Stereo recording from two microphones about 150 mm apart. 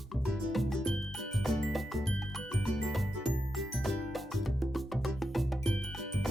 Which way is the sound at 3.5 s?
Centre (ahead or behind).